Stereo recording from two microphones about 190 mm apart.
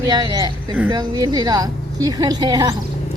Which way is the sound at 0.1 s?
20° right (ahead or behind).